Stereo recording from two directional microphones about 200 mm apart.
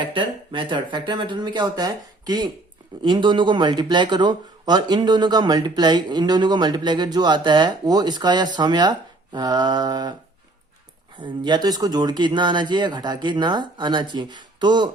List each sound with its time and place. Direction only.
0.0 s speech: 25° right (ahead or behind)
11.2 s speech: 25° right (ahead or behind)